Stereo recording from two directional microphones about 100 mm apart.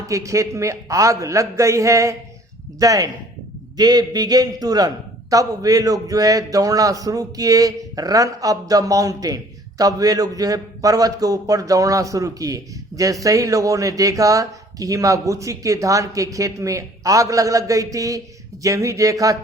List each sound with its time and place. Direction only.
0.1 s a man's voice: 30° right (ahead or behind)